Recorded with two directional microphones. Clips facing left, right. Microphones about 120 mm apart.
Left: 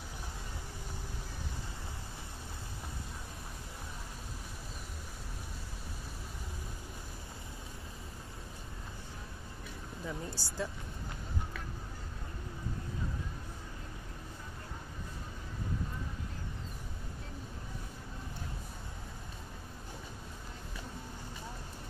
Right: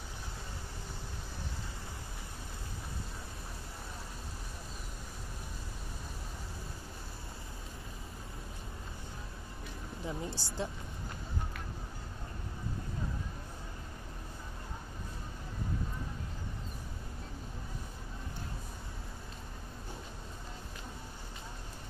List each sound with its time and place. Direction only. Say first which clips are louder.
10.0 s speech: right 2 dB; 20° right (ahead or behind)